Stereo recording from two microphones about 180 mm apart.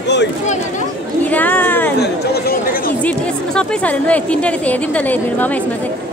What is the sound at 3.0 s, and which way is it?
A woman's voice, 5° left (ahead or behind).